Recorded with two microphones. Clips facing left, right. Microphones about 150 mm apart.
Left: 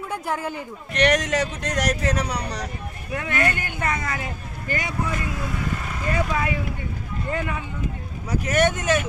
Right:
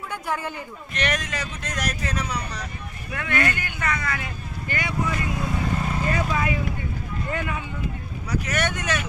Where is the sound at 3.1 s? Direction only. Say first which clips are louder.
Left 1 dB; 30° left (ahead or behind).